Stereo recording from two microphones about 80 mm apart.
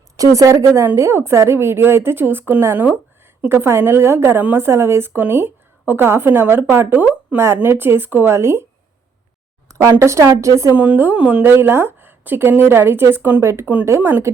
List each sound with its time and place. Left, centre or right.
0.2 s a woman's voice: right
9.6 s a sound: right
9.9 s a woman's voice: right
10.8 s a woman's voice: right
11.4 s a woman's voice: right